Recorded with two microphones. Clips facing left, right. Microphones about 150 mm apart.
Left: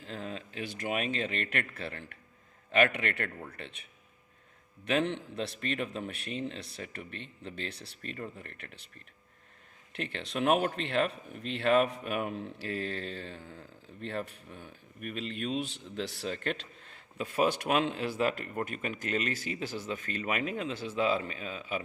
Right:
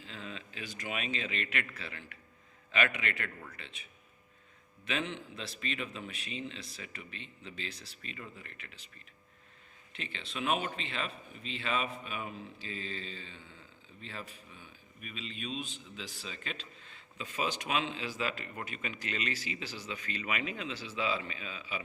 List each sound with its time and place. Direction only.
0.0 s a man's voice: 50° left (ahead or behind)
4.9 s speech: 60° left (ahead or behind)
13.4 s speech: 45° left (ahead or behind)
14.0 s speech: 65° left (ahead or behind)